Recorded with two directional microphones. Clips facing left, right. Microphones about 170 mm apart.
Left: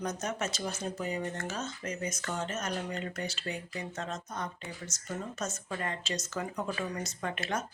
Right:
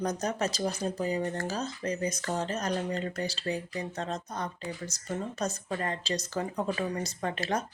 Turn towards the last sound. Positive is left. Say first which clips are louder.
# right 3 dB
turn(degrees=-35)  # may be behind; listen again after turning